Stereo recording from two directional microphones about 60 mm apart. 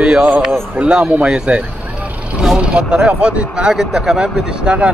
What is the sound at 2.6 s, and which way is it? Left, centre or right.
Speech, centre.